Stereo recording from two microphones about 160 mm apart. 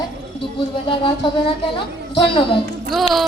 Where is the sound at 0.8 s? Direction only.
30° left (ahead or behind).